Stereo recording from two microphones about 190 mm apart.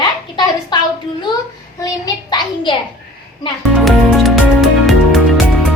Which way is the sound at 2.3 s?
25° left (ahead or behind).